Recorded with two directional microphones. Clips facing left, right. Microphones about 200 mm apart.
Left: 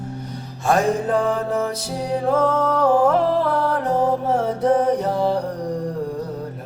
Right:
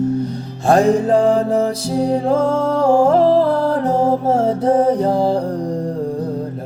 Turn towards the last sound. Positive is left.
turn(degrees=-30)  # may be behind; listen again after turning